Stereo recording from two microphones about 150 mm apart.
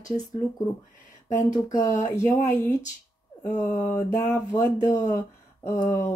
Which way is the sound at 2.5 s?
20° left (ahead or behind).